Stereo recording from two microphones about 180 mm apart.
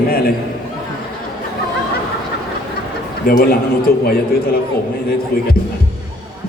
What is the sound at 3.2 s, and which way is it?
Speech, 55° left (ahead or behind).